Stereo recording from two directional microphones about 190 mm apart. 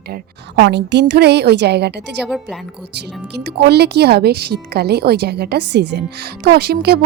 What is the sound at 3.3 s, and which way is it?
A woman's voice, 60° right (ahead or behind).